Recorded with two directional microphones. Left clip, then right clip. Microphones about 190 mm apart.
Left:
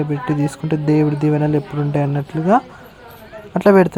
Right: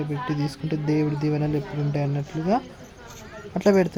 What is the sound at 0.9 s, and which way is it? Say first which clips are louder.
Speech: left 8 dB; 20° left (ahead or behind).